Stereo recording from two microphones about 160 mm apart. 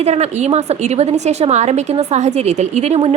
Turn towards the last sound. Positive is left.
turn(degrees=-40)  # may be behind; listen again after turning